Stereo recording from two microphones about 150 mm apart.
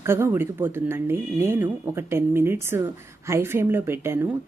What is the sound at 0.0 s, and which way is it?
A woman's voice, 15° right (ahead or behind).